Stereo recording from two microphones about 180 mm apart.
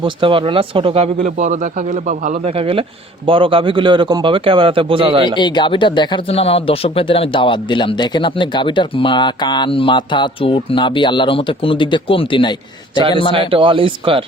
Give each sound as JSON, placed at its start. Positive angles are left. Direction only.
{"t": 0.0, "sound": "a man's voice", "side_deg": -30}
{"t": 1.2, "sound": "a man's voice", "side_deg": -45}
{"t": 2.5, "sound": "a man's voice", "side_deg": -30}
{"t": 5.4, "sound": "speech", "side_deg": 25}
{"t": 13.5, "sound": "a man's voice", "side_deg": -30}